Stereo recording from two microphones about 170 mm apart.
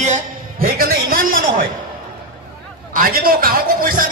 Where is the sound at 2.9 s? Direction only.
55° right (ahead or behind).